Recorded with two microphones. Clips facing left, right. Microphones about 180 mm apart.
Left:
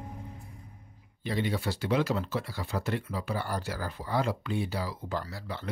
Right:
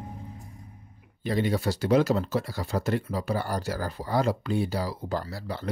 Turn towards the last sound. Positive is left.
turn(degrees=-40)  # may be behind; listen again after turning